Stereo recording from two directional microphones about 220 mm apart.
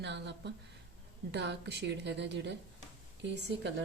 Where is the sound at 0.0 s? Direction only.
50° right (ahead or behind).